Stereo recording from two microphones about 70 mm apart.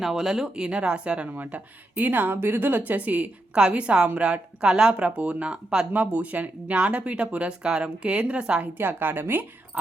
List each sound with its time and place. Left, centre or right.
0.0 s speech: centre
8.8 s a woman's voice: right